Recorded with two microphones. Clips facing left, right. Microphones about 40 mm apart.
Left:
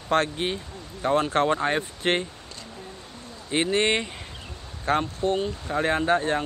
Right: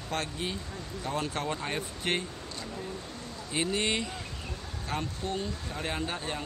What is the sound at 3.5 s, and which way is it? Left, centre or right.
Speech, left.